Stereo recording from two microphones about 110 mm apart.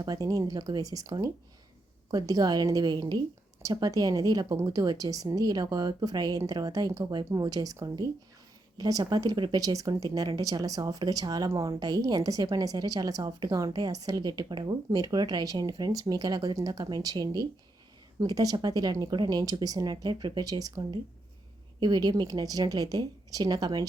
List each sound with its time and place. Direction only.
0.0 s speech: 35° right (ahead or behind)